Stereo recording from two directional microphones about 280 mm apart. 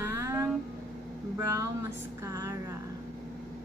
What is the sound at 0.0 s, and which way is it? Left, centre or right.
Vehicle, centre.